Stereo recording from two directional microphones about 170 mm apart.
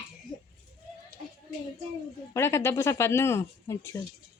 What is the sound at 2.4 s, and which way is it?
A woman's voice, 15° left (ahead or behind).